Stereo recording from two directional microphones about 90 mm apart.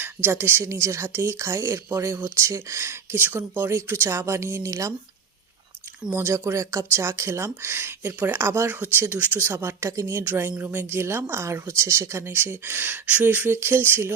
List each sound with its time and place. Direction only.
0.0 s speech: 25° right (ahead or behind)
6.1 s speech: 30° right (ahead or behind)